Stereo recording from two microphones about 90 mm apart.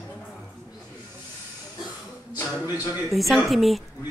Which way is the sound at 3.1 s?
Centre (ahead or behind).